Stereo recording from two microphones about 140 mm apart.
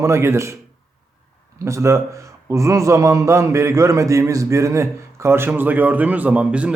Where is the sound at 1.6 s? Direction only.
20° right (ahead or behind).